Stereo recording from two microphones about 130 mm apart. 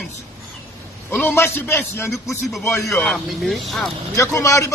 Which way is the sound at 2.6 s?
25° left (ahead or behind).